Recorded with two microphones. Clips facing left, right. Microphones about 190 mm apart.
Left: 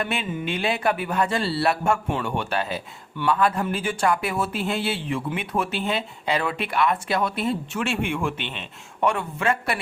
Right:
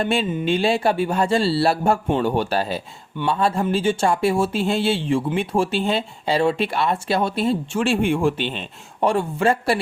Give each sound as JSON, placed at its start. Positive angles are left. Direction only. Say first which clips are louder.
{"t": 0.0, "sound": "speech", "louder": "right 6 dB", "side_deg": -30}